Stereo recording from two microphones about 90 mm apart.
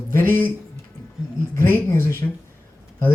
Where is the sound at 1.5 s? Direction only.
30° left (ahead or behind).